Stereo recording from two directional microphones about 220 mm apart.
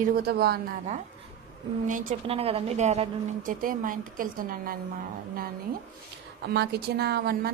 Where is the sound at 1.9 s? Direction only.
35° right (ahead or behind).